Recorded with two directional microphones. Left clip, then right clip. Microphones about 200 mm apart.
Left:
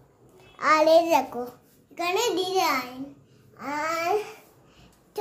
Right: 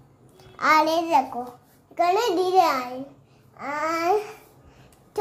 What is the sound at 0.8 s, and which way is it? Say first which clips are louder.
Speech: left 2 dB; 15° left (ahead or behind).